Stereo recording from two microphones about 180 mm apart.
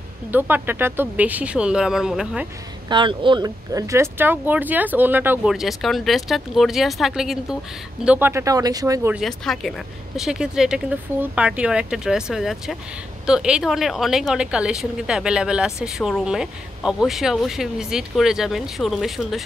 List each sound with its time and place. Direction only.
0.3 s speech: 10° right (ahead or behind)
2.9 s speech: 25° right (ahead or behind)
9.1 s a woman's voice: centre (ahead or behind)